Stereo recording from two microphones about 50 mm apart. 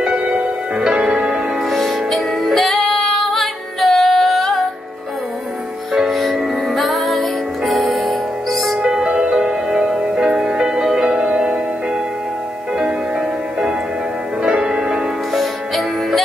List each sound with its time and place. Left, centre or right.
0.0 s music: right
0.8 s music: centre
1.7 s music: centre
5.9 s music: centre
8.8 s music: centre
14.4 s change ringing: centre
15.3 s music: centre